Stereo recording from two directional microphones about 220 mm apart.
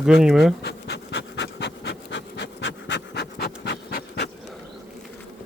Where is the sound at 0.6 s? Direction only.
50° left (ahead or behind).